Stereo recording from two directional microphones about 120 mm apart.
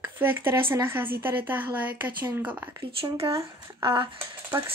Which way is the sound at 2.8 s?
50° right (ahead or behind).